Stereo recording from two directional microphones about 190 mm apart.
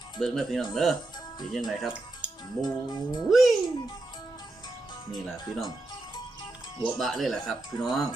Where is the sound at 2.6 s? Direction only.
20° left (ahead or behind).